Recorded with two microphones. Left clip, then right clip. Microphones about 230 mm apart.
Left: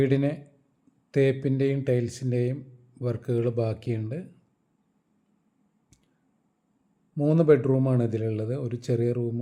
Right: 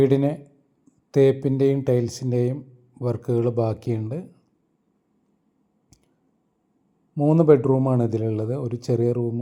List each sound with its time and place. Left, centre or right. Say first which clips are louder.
0.0 s speech: right 5 dB; centre
7.3 s speech: right 4 dB; centre